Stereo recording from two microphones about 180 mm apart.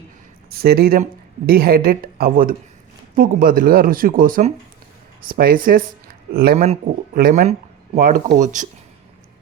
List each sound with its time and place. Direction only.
0.5 s a woman's voice: 60° right (ahead or behind)